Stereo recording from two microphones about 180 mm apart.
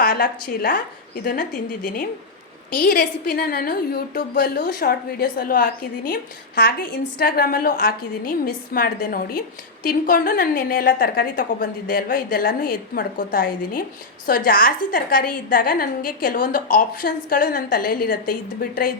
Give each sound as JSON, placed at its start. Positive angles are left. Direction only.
{"t": 0.0, "sound": "a woman's voice", "side_deg": 55}
{"t": 2.7, "sound": "a woman's voice", "side_deg": 55}
{"t": 7.2, "sound": "a woman's voice", "side_deg": 55}